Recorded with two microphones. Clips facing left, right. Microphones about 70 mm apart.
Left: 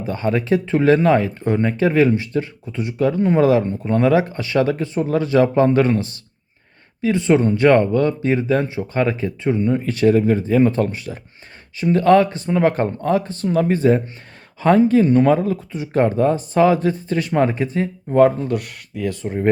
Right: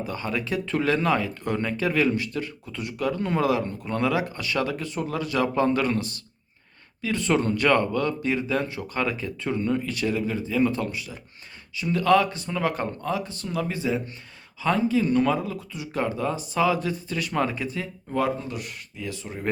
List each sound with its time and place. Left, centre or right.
0.0 s speech: left
9.8 s speech: left